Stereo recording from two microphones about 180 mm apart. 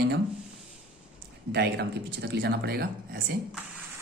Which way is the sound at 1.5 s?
65° right (ahead or behind).